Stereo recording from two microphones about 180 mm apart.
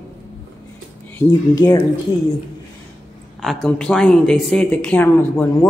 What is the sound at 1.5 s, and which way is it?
Speech, 20° left (ahead or behind).